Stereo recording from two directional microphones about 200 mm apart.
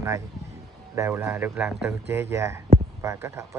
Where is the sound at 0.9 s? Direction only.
10° right (ahead or behind).